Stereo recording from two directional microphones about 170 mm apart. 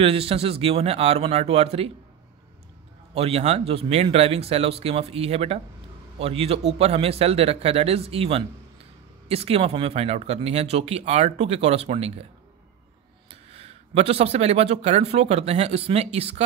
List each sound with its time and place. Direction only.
0.0 s speech: 35° right (ahead or behind)
3.2 s speech: 35° right (ahead or behind)
13.3 s speech: 35° right (ahead or behind)